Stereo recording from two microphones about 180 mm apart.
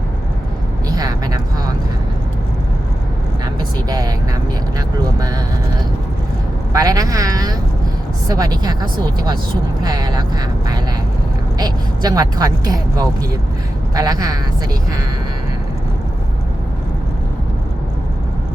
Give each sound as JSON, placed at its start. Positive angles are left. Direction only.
{"t": 0.9, "sound": "a sound", "side_deg": -20}
{"t": 3.8, "sound": "speech", "side_deg": -20}
{"t": 6.7, "sound": "speech", "side_deg": -20}
{"t": 11.5, "sound": "speech", "side_deg": -20}